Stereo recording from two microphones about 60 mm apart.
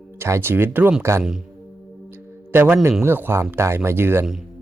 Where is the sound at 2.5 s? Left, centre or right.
Right.